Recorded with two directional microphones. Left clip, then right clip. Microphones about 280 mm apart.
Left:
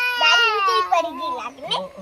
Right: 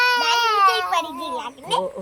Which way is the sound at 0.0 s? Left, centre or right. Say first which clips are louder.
Left 1 dB; right.